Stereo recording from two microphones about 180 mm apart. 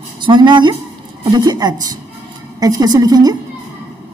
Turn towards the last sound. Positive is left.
turn(degrees=-20)  # may be behind; listen again after turning